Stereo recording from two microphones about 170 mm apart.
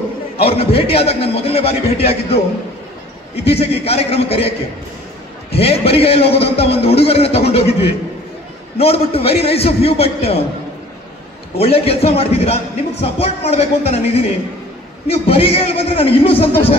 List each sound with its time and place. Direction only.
0.4 s speech: 35° left (ahead or behind)
3.4 s speech: 35° left (ahead or behind)
8.7 s speech: 35° left (ahead or behind)
11.5 s speech: 35° left (ahead or behind)